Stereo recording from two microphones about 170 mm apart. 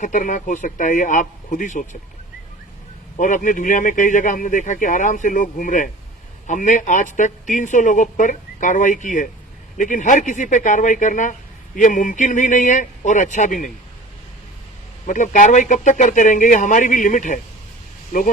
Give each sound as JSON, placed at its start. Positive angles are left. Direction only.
{"t": 0.0, "sound": "speech", "side_deg": 50}
{"t": 3.2, "sound": "speech", "side_deg": 50}
{"t": 15.0, "sound": "speech", "side_deg": 50}